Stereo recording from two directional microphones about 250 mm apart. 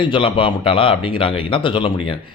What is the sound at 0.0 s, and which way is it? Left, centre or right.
Speech, centre.